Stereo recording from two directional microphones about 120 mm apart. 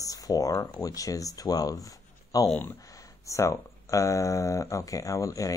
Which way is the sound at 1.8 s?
30° left (ahead or behind).